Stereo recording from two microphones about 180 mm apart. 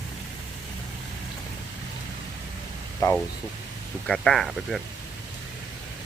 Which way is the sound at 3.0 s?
20° left (ahead or behind).